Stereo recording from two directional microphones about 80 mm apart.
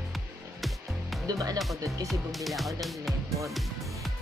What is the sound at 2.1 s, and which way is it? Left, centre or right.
Speech, centre.